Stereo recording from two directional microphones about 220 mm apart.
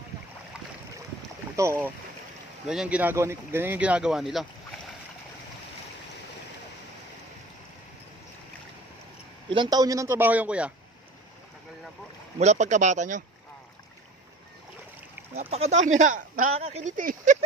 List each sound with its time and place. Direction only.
1.6 s a man's voice: 15° right (ahead or behind)
9.5 s a man's voice: 20° right (ahead or behind)
12.4 s speech: 30° right (ahead or behind)
15.5 s speech: 30° right (ahead or behind)